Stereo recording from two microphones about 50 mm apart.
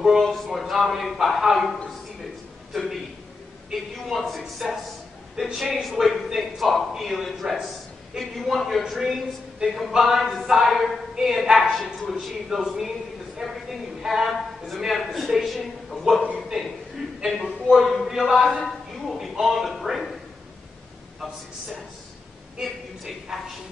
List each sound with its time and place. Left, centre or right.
0.0 s speech: centre
2.7 s a sound: centre
3.7 s a woman's voice: centre
9.0 s a woman's voice: centre
23.3 s a woman's voice: centre